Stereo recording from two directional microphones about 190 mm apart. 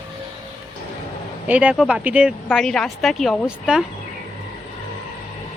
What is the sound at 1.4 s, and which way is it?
Speech, 5° right (ahead or behind).